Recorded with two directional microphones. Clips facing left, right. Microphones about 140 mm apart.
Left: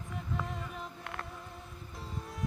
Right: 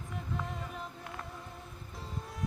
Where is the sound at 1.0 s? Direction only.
65° left (ahead or behind).